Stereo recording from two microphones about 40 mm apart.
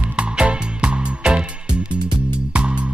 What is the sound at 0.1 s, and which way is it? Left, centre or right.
Music, right.